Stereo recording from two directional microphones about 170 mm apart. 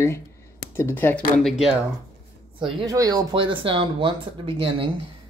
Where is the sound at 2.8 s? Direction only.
20° right (ahead or behind).